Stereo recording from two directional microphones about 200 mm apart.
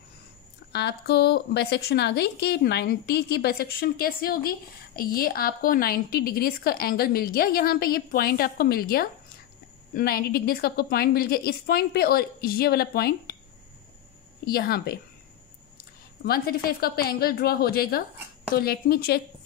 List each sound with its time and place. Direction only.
0.7 s a woman's voice: 55° left (ahead or behind)
14.4 s a woman's voice: 50° left (ahead or behind)